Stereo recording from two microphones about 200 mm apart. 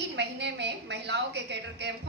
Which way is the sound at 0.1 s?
60° right (ahead or behind).